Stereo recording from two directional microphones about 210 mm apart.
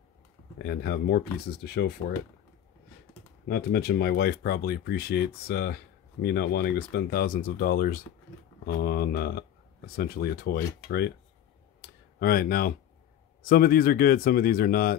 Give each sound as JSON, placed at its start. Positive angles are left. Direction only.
{"t": 0.6, "sound": "speech", "side_deg": 50}
{"t": 3.4, "sound": "speech", "side_deg": 50}
{"t": 11.8, "sound": "a sound", "side_deg": 45}
{"t": 13.4, "sound": "speech", "side_deg": 45}